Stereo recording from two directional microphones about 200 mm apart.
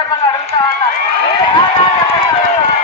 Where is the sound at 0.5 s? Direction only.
20° left (ahead or behind).